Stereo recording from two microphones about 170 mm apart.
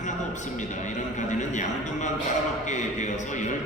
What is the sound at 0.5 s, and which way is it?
A man's voice, 45° left (ahead or behind).